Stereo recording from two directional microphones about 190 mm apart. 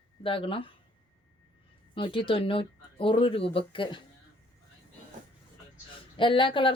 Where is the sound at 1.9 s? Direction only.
25° left (ahead or behind).